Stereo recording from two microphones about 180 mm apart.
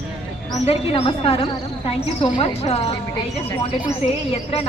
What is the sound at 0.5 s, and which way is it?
A woman's voice, 35° left (ahead or behind).